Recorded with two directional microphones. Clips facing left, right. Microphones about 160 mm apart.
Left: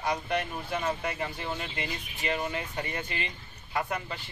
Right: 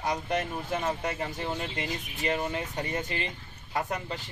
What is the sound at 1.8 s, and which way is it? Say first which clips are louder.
Speech: right 2 dB; 40° right (ahead or behind).